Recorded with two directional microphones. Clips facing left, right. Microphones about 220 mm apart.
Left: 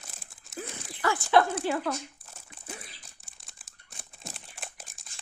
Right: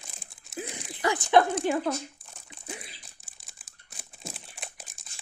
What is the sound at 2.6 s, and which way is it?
Crumpling, 10° right (ahead or behind).